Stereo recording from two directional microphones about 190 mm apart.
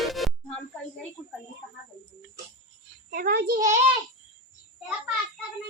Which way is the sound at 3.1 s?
50° right (ahead or behind).